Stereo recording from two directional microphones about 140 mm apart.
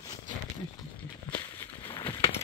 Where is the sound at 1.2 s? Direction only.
15° left (ahead or behind).